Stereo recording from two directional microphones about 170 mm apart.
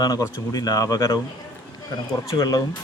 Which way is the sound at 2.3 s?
20° left (ahead or behind).